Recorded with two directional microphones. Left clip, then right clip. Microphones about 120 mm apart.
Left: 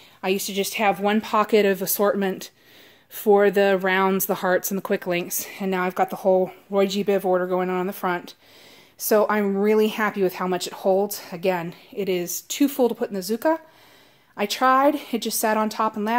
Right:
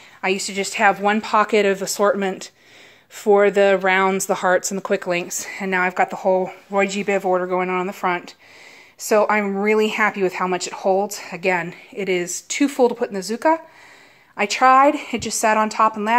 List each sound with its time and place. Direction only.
0.2 s a woman's voice: 20° left (ahead or behind)
1.1 s speech: 40° left (ahead or behind); by 16.2 s 10° left (ahead or behind)